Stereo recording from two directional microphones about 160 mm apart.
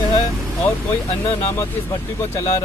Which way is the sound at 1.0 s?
40° left (ahead or behind).